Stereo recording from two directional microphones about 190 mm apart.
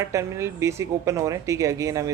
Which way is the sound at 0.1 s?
15° right (ahead or behind).